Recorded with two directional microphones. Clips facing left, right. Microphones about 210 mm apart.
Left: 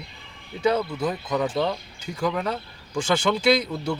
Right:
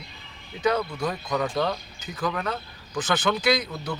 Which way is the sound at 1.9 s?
30° left (ahead or behind).